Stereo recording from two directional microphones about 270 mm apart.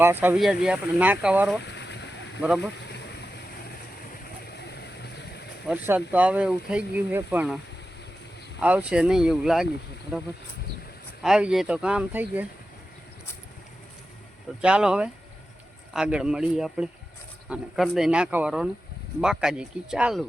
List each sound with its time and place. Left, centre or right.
0.0 s speech: centre
1.6 s a sound: left
4.5 s vehicle: left
5.6 s speech: centre
8.6 s speech: centre
11.2 s speech: centre
14.6 s speech: centre